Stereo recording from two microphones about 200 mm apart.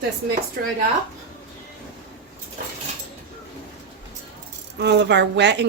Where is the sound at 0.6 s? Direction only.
50° right (ahead or behind).